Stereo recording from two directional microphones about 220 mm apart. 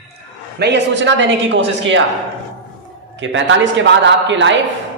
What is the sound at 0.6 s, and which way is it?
Speech, 50° right (ahead or behind).